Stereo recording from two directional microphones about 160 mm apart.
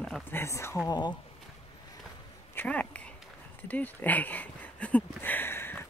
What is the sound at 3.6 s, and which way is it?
Speech, 10° left (ahead or behind).